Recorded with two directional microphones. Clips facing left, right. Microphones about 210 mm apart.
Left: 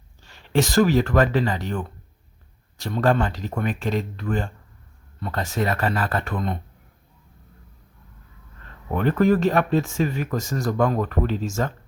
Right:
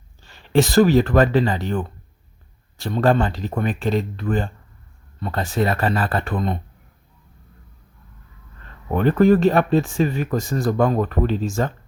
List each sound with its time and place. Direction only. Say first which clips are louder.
0.3 s speech: right 4 dB; 35° right (ahead or behind)
2.8 s speech: right 3 dB; 30° right (ahead or behind)
8.9 s speech: right 4 dB; 35° right (ahead or behind)